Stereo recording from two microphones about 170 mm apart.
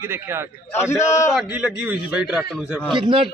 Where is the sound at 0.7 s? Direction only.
15° left (ahead or behind).